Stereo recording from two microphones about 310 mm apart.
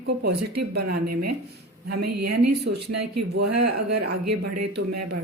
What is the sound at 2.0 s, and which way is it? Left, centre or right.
Speech, right.